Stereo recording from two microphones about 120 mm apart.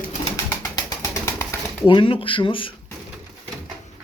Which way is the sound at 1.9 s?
45° left (ahead or behind).